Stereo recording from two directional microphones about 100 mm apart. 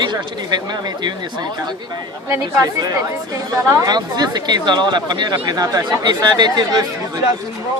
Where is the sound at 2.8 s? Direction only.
35° right (ahead or behind).